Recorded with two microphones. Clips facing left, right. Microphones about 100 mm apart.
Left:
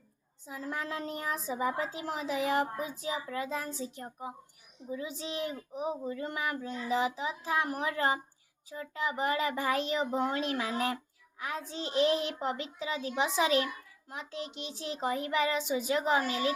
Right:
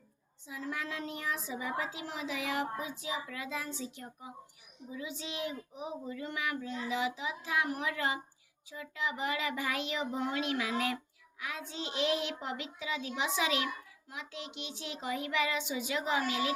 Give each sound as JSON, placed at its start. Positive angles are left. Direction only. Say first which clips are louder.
{"t": 0.4, "sound": "a child's voice", "louder": "left 2 dB", "side_deg": 40}